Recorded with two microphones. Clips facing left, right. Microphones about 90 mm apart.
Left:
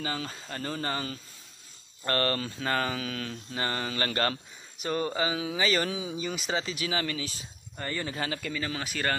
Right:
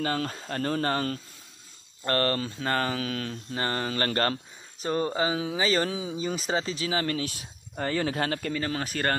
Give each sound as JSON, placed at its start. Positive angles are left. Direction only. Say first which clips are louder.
{"t": 0.0, "sound": "speech", "louder": "right 5 dB", "side_deg": -55}
{"t": 2.0, "sound": "mantra", "louder": "right 2 dB", "side_deg": -30}
{"t": 7.2, "sound": "speech", "louder": "right 5 dB", "side_deg": -60}